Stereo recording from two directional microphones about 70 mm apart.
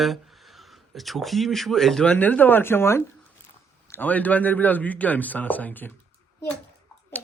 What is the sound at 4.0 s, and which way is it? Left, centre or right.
Speech, left.